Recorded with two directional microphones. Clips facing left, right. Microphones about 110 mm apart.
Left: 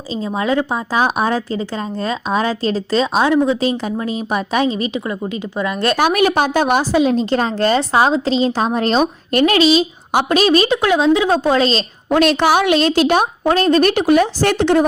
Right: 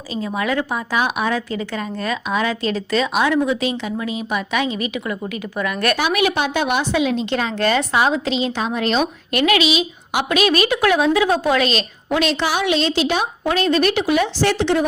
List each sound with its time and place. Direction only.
0.1 s a woman's voice: 30° left (ahead or behind)
6.0 s a woman's voice: 40° left (ahead or behind)
12.1 s a woman's voice: 50° left (ahead or behind)